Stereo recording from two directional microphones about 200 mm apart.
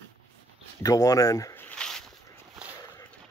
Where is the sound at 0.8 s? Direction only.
20° left (ahead or behind).